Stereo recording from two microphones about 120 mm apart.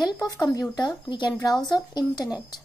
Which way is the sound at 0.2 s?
30° left (ahead or behind).